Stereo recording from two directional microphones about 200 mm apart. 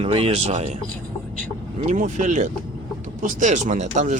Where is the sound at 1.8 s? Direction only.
40° right (ahead or behind).